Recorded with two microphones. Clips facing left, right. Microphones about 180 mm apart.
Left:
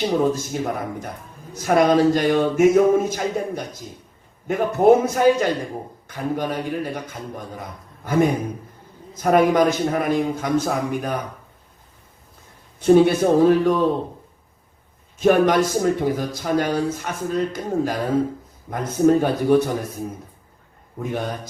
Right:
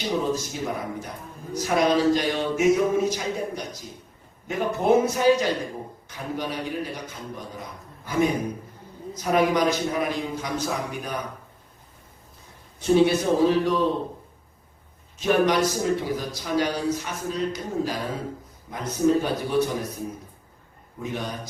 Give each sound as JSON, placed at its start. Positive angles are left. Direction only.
{"t": 0.3, "sound": "speech", "side_deg": 50}
{"t": 12.8, "sound": "speech", "side_deg": 50}
{"t": 15.2, "sound": "speech", "side_deg": 50}
{"t": 21.0, "sound": "speech", "side_deg": 50}